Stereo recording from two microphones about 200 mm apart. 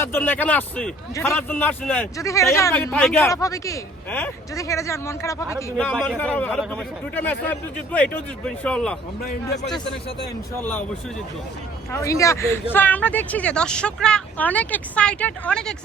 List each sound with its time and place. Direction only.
0.0 s speech: 10° left (ahead or behind)
2.9 s speech: 5° left (ahead or behind)
3.3 s speech: 15° left (ahead or behind)
5.7 s speech: 5° left (ahead or behind)
7.9 s speech: 5° left (ahead or behind)
10.6 s speech: 10° left (ahead or behind)
11.9 s speech: 15° left (ahead or behind)